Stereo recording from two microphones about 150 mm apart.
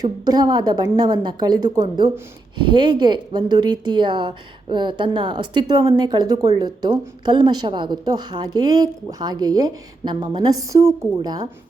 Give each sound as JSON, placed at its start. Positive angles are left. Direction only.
{"t": 0.0, "sound": "a woman's voice", "side_deg": -25}